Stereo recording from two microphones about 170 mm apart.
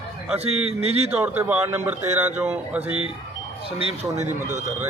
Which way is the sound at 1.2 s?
10° right (ahead or behind).